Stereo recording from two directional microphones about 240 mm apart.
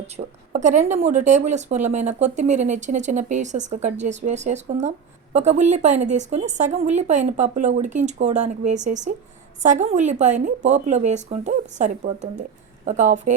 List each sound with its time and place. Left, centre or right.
0.2 s speech: right